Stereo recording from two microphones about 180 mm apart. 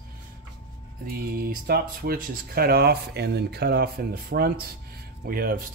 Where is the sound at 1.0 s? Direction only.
55° right (ahead or behind).